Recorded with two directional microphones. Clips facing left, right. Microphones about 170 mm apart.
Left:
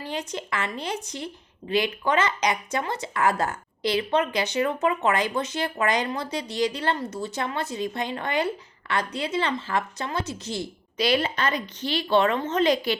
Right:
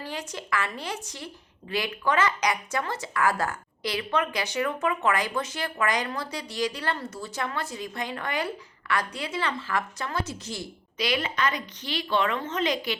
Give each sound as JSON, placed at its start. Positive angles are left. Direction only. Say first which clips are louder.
{"t": 0.0, "sound": "a woman's voice", "louder": "left 4 dB", "side_deg": 20}